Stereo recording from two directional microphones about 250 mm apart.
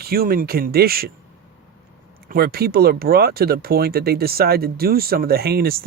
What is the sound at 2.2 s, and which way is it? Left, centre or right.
Speech, right.